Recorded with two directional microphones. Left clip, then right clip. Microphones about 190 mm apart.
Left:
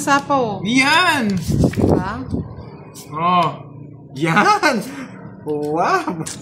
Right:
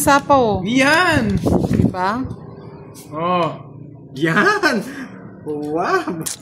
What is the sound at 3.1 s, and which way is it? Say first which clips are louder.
Speech: left 3 dB; 50° left (ahead or behind).